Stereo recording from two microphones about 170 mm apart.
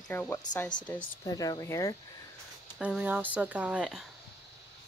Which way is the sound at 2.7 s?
5° right (ahead or behind).